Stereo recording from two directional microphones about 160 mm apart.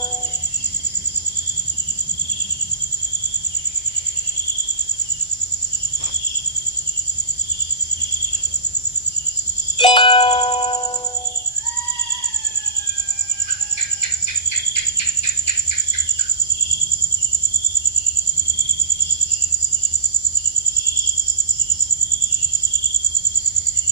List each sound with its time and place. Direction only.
9.7 s music: 30° left (ahead or behind)